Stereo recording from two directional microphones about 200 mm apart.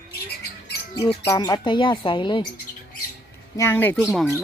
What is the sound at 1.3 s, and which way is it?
Speech, 15° left (ahead or behind).